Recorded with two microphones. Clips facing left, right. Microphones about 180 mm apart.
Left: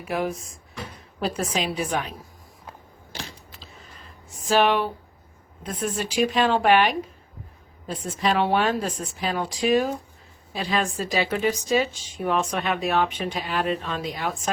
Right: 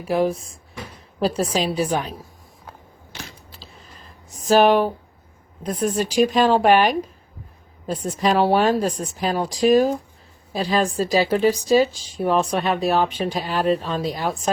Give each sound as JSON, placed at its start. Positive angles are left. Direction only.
{"t": 0.0, "sound": "speech", "side_deg": -30}
{"t": 4.4, "sound": "speech", "side_deg": -40}